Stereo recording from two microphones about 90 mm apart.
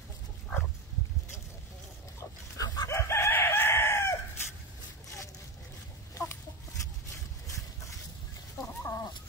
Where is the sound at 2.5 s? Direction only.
40° left (ahead or behind).